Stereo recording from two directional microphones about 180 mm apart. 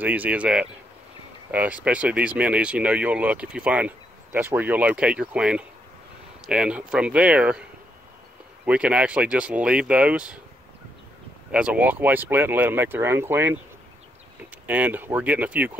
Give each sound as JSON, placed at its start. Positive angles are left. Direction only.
{"t": 0.0, "sound": "speech", "side_deg": -10}
{"t": 8.6, "sound": "speech", "side_deg": -5}
{"t": 11.5, "sound": "speech", "side_deg": -5}
{"t": 14.7, "sound": "speech", "side_deg": -10}